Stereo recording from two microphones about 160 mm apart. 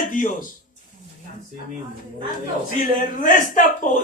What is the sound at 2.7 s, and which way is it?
Speech, 55° left (ahead or behind).